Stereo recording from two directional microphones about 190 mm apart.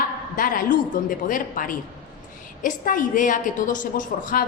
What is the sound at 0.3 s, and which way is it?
A woman's voice, 45° left (ahead or behind).